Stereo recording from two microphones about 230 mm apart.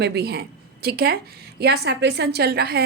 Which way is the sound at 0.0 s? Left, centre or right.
Right.